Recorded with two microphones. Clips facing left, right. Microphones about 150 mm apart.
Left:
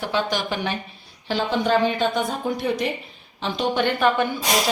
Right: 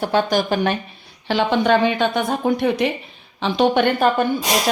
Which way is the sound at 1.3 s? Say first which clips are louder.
Right 5 dB; 70° right (ahead or behind).